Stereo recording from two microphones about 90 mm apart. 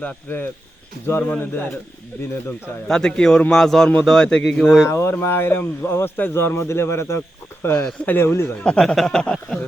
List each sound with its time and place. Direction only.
0.0 s speech: 20° left (ahead or behind)
2.8 s speech: 10° left (ahead or behind)
3.5 s a sound: 5° left (ahead or behind)
4.0 s speech: 5° left (ahead or behind)
4.7 s speech: 30° left (ahead or behind)
7.7 s speech: 10° left (ahead or behind)
8.1 s speech: 25° left (ahead or behind)
8.8 s a sound: 5° left (ahead or behind)